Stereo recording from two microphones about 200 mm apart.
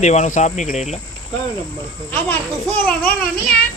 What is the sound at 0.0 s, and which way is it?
Speech, 35° left (ahead or behind).